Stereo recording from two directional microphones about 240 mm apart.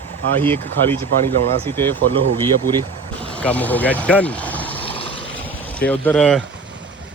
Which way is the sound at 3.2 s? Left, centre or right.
Centre.